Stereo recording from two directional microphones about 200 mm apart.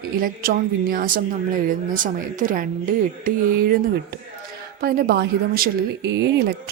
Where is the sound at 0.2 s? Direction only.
45° right (ahead or behind).